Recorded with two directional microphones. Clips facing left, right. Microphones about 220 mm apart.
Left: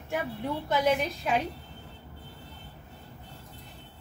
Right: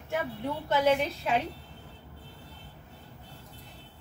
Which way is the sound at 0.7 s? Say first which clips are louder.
Right 1 dB; 15° left (ahead or behind).